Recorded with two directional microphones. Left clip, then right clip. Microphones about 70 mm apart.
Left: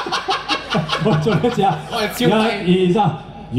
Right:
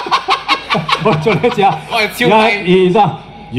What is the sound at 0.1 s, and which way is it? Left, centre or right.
Chicken, right.